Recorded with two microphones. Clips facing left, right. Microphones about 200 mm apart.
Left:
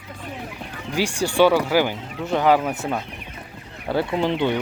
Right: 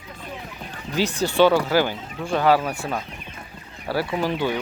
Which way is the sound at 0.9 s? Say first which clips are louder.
Even; 10° left (ahead or behind).